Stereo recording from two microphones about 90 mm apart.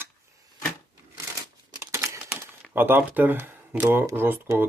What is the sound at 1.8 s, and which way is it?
Crumpling, 30° right (ahead or behind).